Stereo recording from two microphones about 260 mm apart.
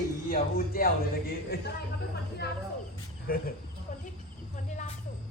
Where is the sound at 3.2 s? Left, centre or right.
Left.